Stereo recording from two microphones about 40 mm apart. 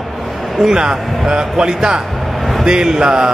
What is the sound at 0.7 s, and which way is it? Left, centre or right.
Speech, centre.